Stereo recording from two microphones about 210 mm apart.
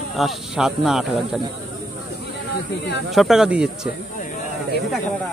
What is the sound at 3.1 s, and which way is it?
Speech, centre (ahead or behind).